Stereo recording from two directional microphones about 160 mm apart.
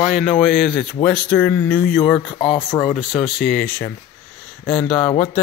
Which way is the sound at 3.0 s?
Centre (ahead or behind).